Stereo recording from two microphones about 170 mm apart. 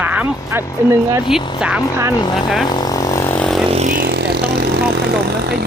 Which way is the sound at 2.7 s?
25° left (ahead or behind).